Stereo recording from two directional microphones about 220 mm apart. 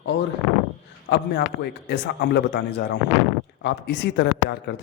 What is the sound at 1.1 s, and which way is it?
Speech, 50° left (ahead or behind).